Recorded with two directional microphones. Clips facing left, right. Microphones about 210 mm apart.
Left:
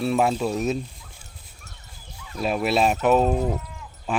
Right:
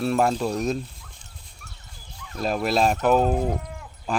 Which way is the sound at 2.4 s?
5° left (ahead or behind).